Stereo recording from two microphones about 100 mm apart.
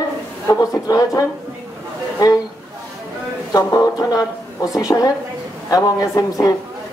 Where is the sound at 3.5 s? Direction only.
35° left (ahead or behind).